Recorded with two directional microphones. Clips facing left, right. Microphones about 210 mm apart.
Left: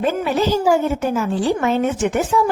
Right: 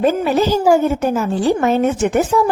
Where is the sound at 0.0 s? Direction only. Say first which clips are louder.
Right 4 dB; 40° right (ahead or behind).